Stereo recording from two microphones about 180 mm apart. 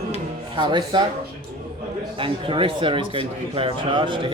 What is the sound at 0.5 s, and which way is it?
Speech, 25° right (ahead or behind).